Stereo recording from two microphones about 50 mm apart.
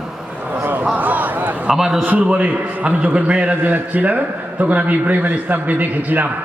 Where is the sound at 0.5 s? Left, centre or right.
Right.